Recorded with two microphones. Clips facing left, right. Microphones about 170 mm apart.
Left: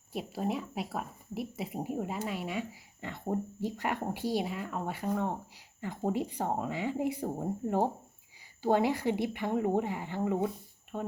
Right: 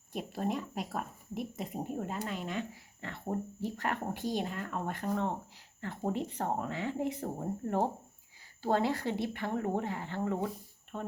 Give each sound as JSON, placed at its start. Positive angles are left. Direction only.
{"t": 0.1, "sound": "speech", "side_deg": 5}